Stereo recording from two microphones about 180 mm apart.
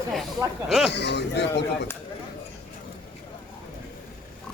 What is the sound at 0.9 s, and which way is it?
Speech, 70° left (ahead or behind).